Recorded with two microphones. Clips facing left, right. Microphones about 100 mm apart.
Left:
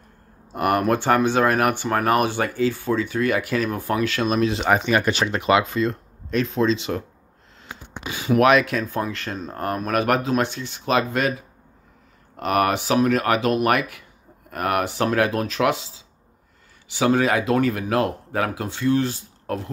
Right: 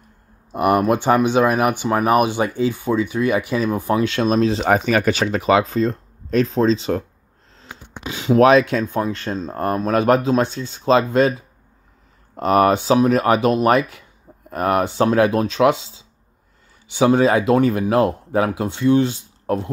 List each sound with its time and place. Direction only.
0.5 s speech: 20° right (ahead or behind); by 7.0 s 35° right (ahead or behind)
8.0 s speech: 20° right (ahead or behind)